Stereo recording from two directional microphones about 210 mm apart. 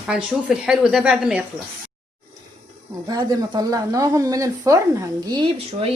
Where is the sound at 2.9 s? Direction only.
20° right (ahead or behind).